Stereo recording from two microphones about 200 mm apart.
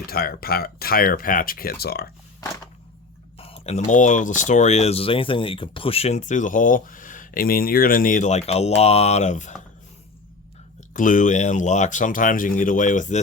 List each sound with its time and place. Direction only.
0.1 s speech: 50° left (ahead or behind)
3.3 s speech: 30° left (ahead or behind)
10.9 s speech: 40° left (ahead or behind)